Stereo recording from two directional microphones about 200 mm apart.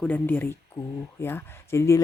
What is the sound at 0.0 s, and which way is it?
Speech, 10° left (ahead or behind).